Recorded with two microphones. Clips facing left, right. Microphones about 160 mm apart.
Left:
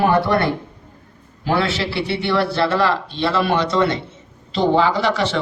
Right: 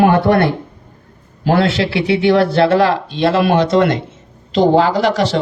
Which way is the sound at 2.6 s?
50° right (ahead or behind).